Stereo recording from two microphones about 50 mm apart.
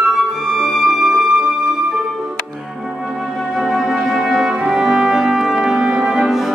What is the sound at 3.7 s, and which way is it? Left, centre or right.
Music, centre.